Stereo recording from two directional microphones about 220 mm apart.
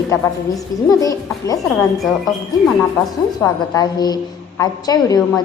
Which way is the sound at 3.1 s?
15° left (ahead or behind).